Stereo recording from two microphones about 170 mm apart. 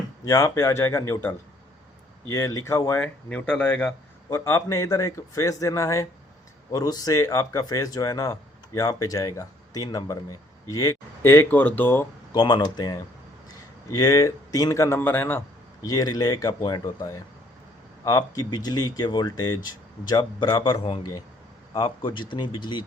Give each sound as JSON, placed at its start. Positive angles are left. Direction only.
{"t": 0.3, "sound": "speech", "side_deg": 20}
{"t": 12.3, "sound": "speech", "side_deg": 25}